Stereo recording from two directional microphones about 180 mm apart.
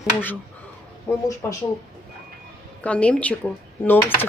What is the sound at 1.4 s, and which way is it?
Speech, 15° left (ahead or behind).